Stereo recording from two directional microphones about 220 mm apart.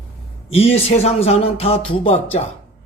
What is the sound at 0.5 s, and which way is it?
Speech, 25° left (ahead or behind).